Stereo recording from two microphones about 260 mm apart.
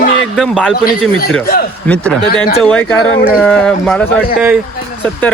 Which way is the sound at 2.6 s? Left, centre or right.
Centre.